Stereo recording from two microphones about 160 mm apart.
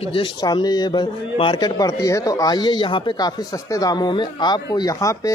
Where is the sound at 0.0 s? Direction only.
35° left (ahead or behind).